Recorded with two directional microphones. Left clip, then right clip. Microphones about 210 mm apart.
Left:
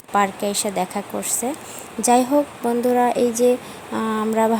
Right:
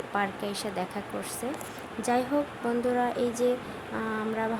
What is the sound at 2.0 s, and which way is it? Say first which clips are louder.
Speech: left 10 dB; 35° left (ahead or behind).